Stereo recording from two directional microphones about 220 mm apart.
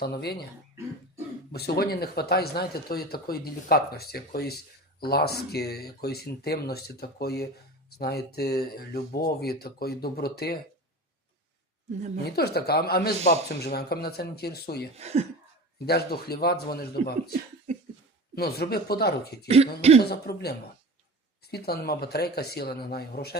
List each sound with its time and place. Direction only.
0.0 s speech: 45° left (ahead or behind)
1.5 s speech: 45° left (ahead or behind)
12.2 s speech: 45° left (ahead or behind)
14.9 s speech: 30° right (ahead or behind)
15.9 s speech: 45° left (ahead or behind)
18.3 s speech: 45° left (ahead or behind)
19.5 s speech: 30° right (ahead or behind)
20.0 s speech: 45° left (ahead or behind)